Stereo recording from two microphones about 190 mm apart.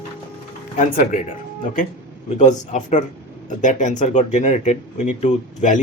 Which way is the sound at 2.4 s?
40° left (ahead or behind).